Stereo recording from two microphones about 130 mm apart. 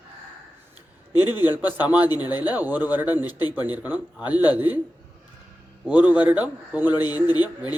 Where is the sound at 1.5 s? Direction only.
15° right (ahead or behind).